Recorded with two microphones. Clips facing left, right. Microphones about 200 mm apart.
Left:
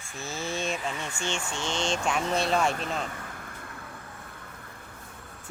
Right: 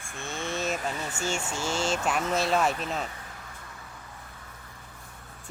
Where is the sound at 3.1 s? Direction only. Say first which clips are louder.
Left 4 dB; 55° left (ahead or behind).